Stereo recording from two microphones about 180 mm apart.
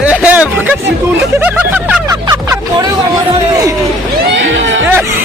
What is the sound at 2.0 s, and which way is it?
Turkey, 20° right (ahead or behind).